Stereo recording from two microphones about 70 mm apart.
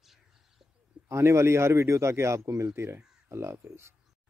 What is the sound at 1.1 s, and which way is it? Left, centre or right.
Speech, right.